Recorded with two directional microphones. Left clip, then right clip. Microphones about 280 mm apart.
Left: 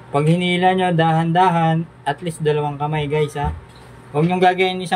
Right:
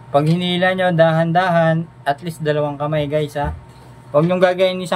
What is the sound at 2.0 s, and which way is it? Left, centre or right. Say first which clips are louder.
Speech: right 1 dB; centre.